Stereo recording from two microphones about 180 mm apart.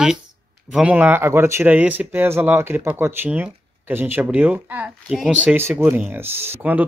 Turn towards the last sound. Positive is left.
turn(degrees=-10)  # may be behind; listen again after turning